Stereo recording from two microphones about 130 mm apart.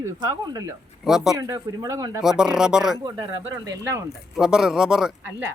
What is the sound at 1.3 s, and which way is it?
Speech, 25° right (ahead or behind).